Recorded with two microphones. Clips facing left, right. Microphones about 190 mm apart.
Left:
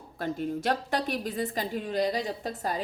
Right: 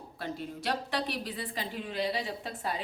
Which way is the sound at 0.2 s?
45° left (ahead or behind).